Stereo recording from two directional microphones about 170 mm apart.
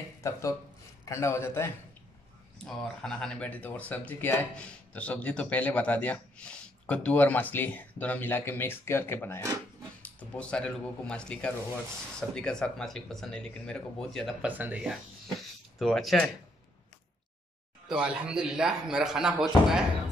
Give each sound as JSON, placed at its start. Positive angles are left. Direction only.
{"t": 0.2, "sound": "speech", "side_deg": 20}
{"t": 2.6, "sound": "speech", "side_deg": 5}
{"t": 17.8, "sound": "speech", "side_deg": -5}